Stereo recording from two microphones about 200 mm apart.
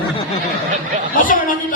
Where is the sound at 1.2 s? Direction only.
45° left (ahead or behind).